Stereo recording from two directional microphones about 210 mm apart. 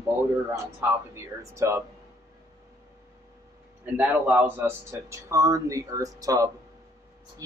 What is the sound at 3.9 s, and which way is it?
Speech, 10° right (ahead or behind).